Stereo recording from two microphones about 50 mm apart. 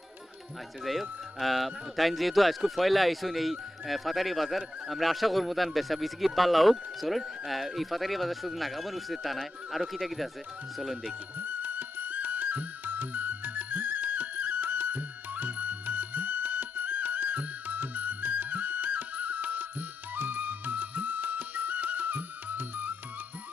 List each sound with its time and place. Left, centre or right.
0.9 s speech: centre
11.3 s music: right